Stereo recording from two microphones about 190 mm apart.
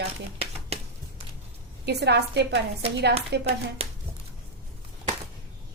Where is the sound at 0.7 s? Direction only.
35° right (ahead or behind).